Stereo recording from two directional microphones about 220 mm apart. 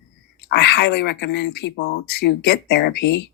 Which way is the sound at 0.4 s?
50° left (ahead or behind).